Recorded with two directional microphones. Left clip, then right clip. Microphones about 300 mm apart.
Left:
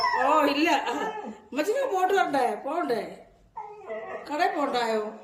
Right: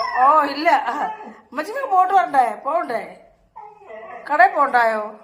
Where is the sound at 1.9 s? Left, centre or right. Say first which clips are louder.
Right 11 dB; centre.